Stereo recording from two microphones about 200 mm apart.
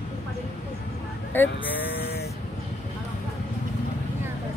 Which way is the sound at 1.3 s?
10° left (ahead or behind).